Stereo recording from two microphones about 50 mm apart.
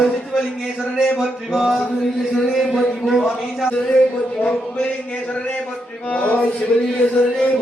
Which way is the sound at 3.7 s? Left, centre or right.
Left.